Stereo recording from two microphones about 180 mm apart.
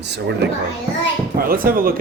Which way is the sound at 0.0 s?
70° right (ahead or behind).